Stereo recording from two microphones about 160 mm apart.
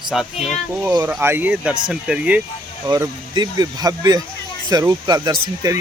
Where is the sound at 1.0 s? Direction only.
10° right (ahead or behind).